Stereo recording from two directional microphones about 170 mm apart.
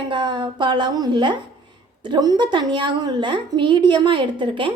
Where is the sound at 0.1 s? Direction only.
25° right (ahead or behind).